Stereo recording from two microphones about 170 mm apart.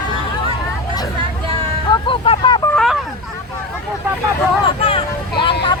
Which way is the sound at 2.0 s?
30° left (ahead or behind).